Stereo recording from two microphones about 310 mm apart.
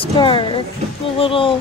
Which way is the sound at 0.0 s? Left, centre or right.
Centre.